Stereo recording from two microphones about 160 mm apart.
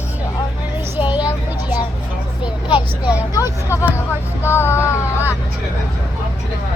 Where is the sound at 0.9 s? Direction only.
10° right (ahead or behind).